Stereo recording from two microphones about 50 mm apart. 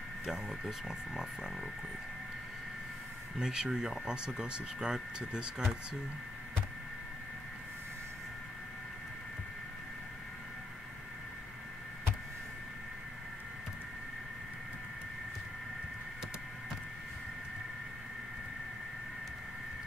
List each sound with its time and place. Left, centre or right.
0.2 s speech: centre
3.3 s speech: centre